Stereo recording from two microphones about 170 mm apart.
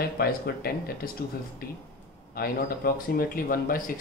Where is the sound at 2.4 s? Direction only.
60° left (ahead or behind).